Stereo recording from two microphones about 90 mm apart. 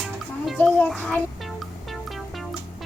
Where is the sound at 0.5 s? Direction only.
15° left (ahead or behind).